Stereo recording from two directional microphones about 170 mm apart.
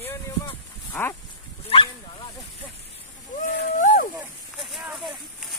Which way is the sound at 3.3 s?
50° left (ahead or behind).